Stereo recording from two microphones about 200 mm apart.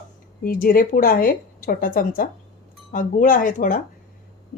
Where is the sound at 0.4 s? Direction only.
45° left (ahead or behind).